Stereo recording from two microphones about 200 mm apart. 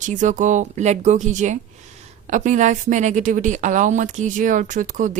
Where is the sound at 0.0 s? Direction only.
40° right (ahead or behind).